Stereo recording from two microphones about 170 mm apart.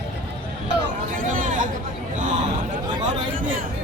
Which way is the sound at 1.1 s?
50° right (ahead or behind).